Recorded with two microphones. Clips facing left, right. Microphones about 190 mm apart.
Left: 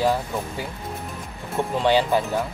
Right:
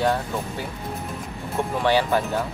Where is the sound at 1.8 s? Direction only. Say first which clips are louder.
Left 1 dB; 20° left (ahead or behind).